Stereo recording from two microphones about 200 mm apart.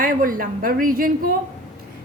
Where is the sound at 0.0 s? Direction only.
45° right (ahead or behind).